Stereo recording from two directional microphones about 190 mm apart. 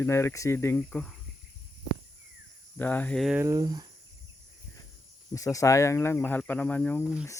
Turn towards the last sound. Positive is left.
turn(degrees=10)  # may be behind; listen again after turning